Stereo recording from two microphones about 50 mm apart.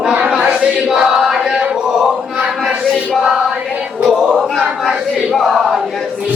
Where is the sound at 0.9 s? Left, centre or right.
Centre.